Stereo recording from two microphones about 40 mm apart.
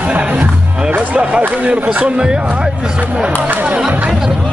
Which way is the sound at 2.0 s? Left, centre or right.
Right.